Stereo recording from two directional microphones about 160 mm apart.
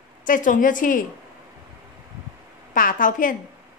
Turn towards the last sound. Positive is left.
turn(degrees=55)  # may be behind; listen again after turning